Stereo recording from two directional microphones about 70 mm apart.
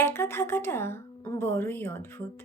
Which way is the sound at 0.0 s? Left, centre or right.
Left.